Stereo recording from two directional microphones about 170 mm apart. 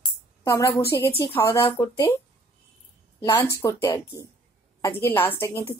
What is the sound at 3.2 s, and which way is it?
A woman's voice, 15° left (ahead or behind).